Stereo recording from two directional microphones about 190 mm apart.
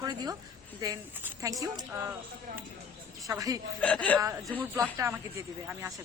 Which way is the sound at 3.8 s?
5° left (ahead or behind).